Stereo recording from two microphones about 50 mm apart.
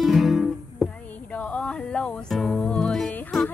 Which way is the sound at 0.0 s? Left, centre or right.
Centre.